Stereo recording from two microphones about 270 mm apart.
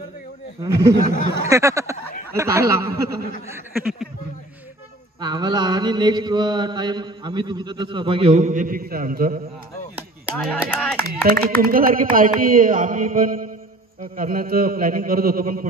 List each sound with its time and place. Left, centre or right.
1.0 s speech: left
1.5 s speech: centre
2.3 s mantra: centre
3.4 s a sound: centre
5.2 s mantra: centre; by 9.4 s right
10.3 s speech: centre
11.2 s speech: right